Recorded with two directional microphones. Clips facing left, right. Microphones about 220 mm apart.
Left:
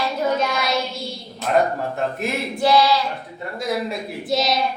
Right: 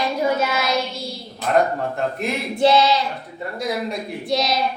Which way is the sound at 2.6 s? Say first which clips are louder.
Right 1 dB; 20° right (ahead or behind).